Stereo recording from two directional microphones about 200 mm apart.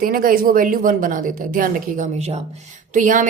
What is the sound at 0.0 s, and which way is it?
A woman's voice, 45° right (ahead or behind).